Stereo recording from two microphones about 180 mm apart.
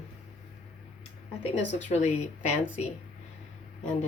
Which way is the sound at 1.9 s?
35° left (ahead or behind).